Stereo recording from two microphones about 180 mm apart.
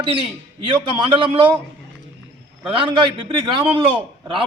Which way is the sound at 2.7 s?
30° right (ahead or behind).